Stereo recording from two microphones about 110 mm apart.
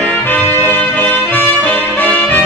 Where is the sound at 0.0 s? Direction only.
15° left (ahead or behind).